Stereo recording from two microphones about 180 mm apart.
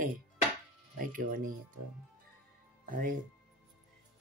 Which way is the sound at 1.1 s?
50° right (ahead or behind).